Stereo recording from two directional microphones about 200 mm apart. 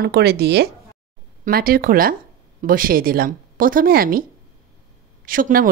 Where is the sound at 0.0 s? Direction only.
55° right (ahead or behind).